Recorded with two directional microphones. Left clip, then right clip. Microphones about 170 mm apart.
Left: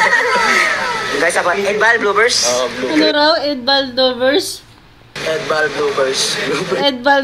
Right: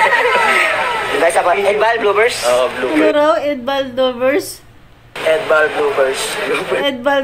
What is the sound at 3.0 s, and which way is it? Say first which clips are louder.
A woman's voice: right 1 dB; 10° left (ahead or behind).